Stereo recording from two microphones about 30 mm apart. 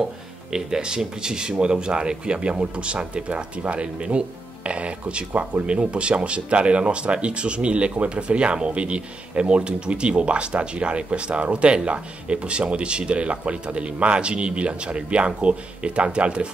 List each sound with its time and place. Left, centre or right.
0.5 s speech: right